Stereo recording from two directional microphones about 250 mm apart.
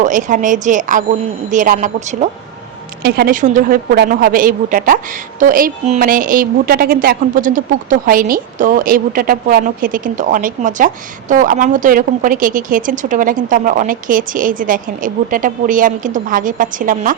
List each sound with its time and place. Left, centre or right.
0.0 s a woman's voice: right